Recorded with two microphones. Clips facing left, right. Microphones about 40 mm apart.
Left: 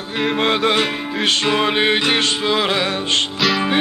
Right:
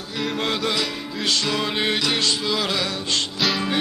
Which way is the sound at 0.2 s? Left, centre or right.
Left.